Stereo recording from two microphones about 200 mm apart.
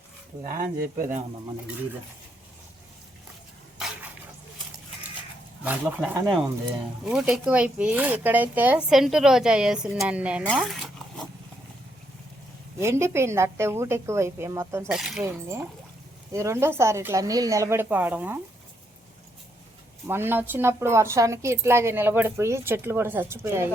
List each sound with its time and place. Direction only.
0.4 s speech: 40° right (ahead or behind)
3.8 s a sound: centre (ahead or behind)
5.6 s a woman's voice: 10° right (ahead or behind)
10.4 s zipper: centre (ahead or behind)
12.8 s a woman's voice: 15° right (ahead or behind)
14.8 s speech: 5° right (ahead or behind)
16.3 s a woman's voice: 15° right (ahead or behind)
20.1 s a woman's voice: 10° right (ahead or behind)